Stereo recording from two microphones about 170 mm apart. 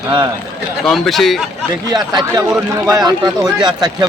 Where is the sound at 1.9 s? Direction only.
25° right (ahead or behind).